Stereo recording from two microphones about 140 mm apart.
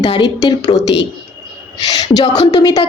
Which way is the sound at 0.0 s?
35° left (ahead or behind).